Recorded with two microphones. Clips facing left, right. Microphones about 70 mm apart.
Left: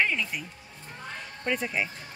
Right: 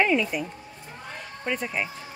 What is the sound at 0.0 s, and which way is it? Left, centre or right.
Speech, centre.